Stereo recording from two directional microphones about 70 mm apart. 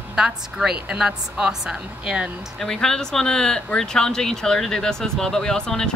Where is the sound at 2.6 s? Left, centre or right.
Centre.